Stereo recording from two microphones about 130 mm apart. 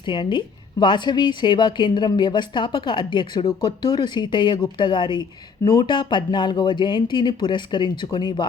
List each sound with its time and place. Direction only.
0.0 s a woman's voice: 40° left (ahead or behind)